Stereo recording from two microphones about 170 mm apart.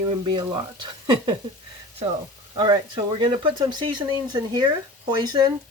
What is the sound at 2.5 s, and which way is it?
Speech, 25° right (ahead or behind).